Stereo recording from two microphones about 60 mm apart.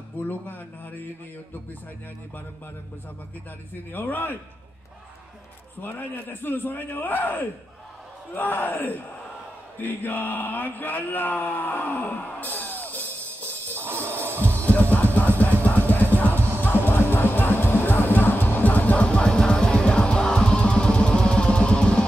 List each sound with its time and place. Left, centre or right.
0.3 s a man's voice: left
3.9 s a man's voice: left
5.8 s a man's voice: left
13.7 s music: right
14.7 s music: left
15.1 s a sound: left
15.6 s music: left
16.3 s music: right
16.6 s music: left; by 22.0 s centre